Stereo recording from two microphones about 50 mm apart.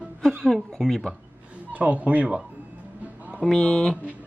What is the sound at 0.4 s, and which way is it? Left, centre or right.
Speech, centre.